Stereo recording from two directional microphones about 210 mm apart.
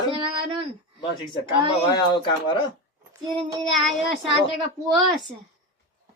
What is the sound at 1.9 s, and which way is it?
Speech, 20° left (ahead or behind).